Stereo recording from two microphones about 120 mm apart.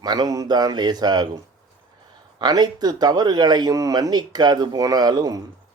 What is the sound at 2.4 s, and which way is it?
Speech, 35° right (ahead or behind).